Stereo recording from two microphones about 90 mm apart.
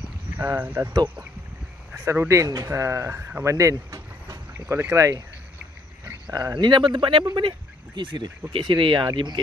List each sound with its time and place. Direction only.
0.5 s speech: 20° right (ahead or behind)
2.0 s speech: 35° right (ahead or behind)
3.4 s vehicle: 35° right (ahead or behind)
4.6 s speech: 25° right (ahead or behind)
6.3 s speech: 50° right (ahead or behind); by 7.2 s 70° right (ahead or behind)
7.4 s a sound: 65° right (ahead or behind)
8.5 s speech: 65° right (ahead or behind)